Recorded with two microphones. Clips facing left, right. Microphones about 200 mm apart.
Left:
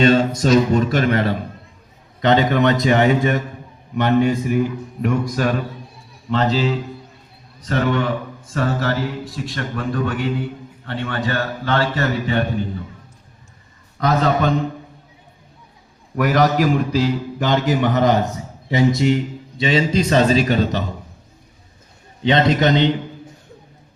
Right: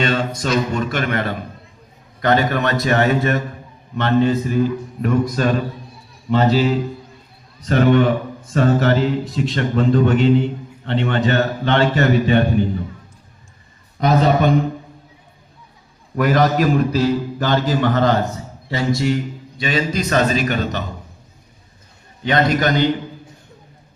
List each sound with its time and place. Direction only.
0.0 s a sound: 40° left (ahead or behind)
2.2 s a man's voice: 20° left (ahead or behind)
6.3 s a man's voice: 10° right (ahead or behind)
7.7 s a man's voice: 20° right (ahead or behind)
14.0 s a man's voice: 15° right (ahead or behind)
16.1 s a man's voice: 10° left (ahead or behind); by 20.8 s 30° left (ahead or behind)
22.2 s a man's voice: 25° left (ahead or behind)